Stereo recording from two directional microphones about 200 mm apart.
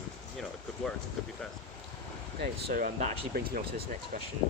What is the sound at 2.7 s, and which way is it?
Speech, 40° right (ahead or behind).